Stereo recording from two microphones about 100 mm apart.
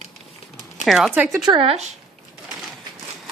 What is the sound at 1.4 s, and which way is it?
Speech, 55° right (ahead or behind).